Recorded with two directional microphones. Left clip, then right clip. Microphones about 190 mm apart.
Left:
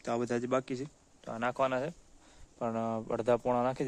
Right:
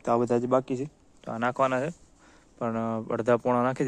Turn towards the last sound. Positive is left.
turn(degrees=-10)  # may be behind; listen again after turning